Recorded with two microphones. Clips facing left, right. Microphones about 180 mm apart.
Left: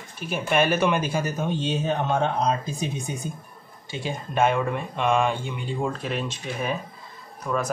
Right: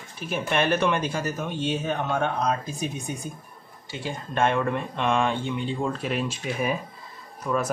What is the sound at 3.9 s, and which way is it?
Speech, 15° left (ahead or behind).